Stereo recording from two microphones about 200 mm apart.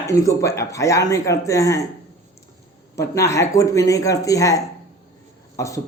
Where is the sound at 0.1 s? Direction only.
15° left (ahead or behind).